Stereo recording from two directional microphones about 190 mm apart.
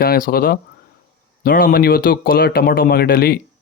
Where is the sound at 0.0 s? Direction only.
55° left (ahead or behind).